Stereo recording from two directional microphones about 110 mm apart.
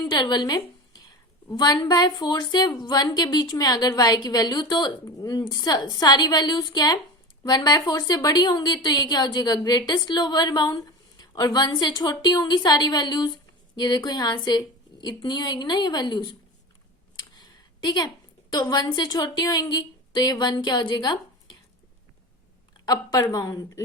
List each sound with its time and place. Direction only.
0.1 s a woman's voice: 45° left (ahead or behind)
17.3 s a sound: 40° left (ahead or behind)
18.5 s a woman's voice: 40° left (ahead or behind)
23.3 s a woman's voice: 40° left (ahead or behind)